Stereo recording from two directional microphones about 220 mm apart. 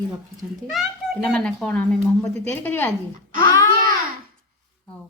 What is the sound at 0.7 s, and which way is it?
A child's voice, centre (ahead or behind).